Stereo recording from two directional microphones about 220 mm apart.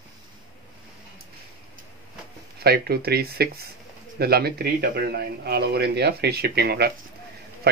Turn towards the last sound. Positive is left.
turn(degrees=-45)  # may be behind; listen again after turning